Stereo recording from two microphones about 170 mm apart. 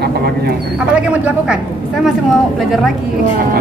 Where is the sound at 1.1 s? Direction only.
10° right (ahead or behind).